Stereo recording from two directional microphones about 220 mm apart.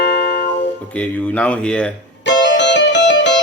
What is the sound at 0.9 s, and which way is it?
Speech, 5° left (ahead or behind).